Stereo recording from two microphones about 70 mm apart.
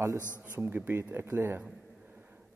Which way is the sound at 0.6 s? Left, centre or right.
Right.